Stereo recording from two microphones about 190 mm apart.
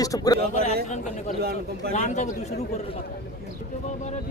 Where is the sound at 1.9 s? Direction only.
40° left (ahead or behind).